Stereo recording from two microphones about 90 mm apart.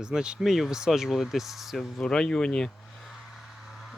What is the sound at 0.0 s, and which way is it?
Speech, 10° right (ahead or behind).